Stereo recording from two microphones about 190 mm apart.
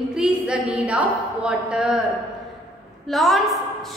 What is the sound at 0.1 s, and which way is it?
A woman's voice, 5° right (ahead or behind).